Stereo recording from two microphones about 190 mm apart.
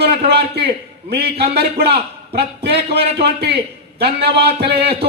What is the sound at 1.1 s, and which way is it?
A man's voice, 60° right (ahead or behind).